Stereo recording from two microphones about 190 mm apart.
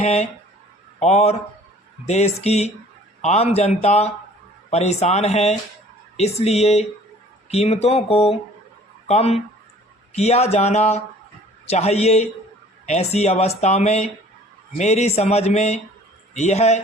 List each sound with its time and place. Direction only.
0.0 s speech: 35° left (ahead or behind)